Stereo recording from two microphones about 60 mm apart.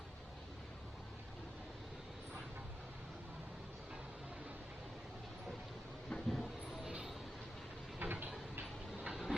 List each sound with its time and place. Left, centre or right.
6.1 s train: centre
7.9 s vehicle: right
9.0 s train: centre